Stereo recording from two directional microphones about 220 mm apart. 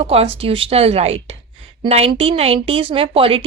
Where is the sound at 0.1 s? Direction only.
25° right (ahead or behind).